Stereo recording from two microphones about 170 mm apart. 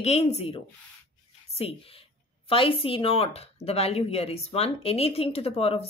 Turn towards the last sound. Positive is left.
turn(degrees=35)  # may be behind; listen again after turning